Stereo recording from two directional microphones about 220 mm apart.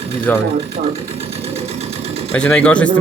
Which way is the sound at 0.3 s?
10° left (ahead or behind).